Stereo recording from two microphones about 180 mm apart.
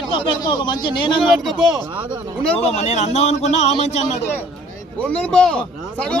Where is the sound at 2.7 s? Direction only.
40° left (ahead or behind).